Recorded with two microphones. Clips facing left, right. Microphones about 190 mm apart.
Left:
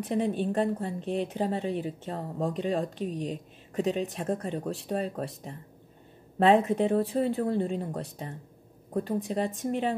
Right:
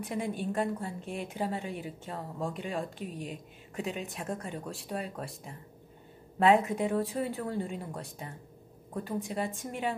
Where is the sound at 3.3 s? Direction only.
35° left (ahead or behind).